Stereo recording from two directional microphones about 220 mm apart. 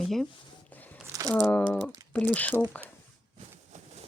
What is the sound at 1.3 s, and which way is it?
Speech, 5° left (ahead or behind).